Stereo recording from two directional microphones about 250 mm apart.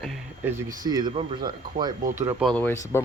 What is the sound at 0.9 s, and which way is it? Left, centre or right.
Speech, centre.